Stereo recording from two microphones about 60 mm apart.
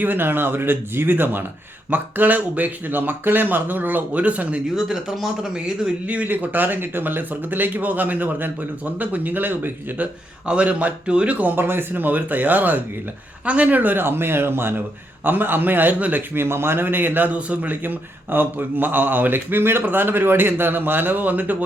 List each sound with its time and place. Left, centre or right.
0.0 s a man's voice: right
4.7 s speech: centre
6.1 s a man's voice: right
10.4 s speech: right
11.5 s a man's voice: right
16.3 s a man's voice: right